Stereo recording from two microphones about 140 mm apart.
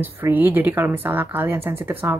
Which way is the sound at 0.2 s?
10° right (ahead or behind).